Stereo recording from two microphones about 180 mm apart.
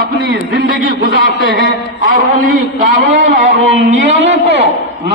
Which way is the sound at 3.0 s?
45° right (ahead or behind).